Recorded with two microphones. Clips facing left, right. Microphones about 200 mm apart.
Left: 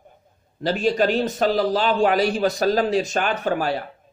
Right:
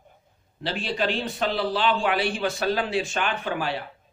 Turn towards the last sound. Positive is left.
turn(degrees=45)  # may be behind; listen again after turning